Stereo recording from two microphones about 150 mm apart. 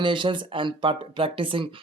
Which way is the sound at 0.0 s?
35° right (ahead or behind).